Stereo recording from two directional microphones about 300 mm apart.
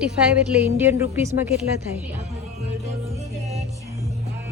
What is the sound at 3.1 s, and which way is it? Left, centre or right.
Music, right.